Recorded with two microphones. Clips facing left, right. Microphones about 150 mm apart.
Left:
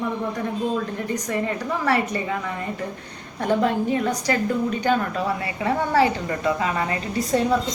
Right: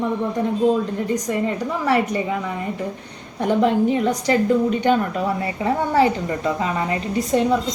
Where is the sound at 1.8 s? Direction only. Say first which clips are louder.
Right 3 dB; 20° right (ahead or behind).